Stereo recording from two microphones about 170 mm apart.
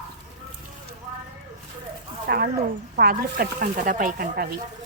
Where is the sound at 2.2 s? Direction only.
70° right (ahead or behind).